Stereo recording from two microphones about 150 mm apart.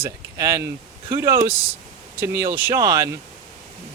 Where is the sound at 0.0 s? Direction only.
20° right (ahead or behind).